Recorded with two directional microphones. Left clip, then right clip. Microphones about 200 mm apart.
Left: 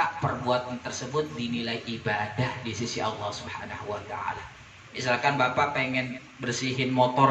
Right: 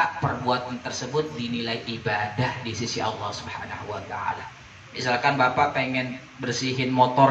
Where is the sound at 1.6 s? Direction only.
25° left (ahead or behind).